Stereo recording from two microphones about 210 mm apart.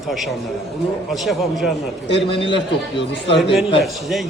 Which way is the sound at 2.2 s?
25° left (ahead or behind).